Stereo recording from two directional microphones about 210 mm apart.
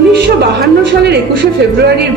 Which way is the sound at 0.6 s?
50° right (ahead or behind).